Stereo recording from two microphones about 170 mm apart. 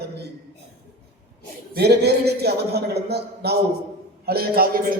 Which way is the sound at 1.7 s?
70° right (ahead or behind).